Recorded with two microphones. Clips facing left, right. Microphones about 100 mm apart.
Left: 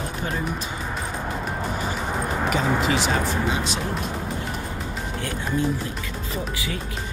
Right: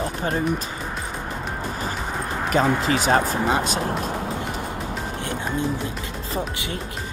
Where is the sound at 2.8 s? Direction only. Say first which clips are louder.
Right 3 dB; 45° right (ahead or behind).